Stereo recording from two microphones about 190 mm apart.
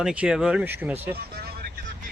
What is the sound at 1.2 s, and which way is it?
Vehicle, 55° right (ahead or behind).